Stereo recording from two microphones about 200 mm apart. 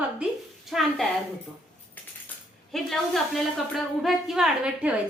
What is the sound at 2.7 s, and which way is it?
A woman's voice, centre (ahead or behind).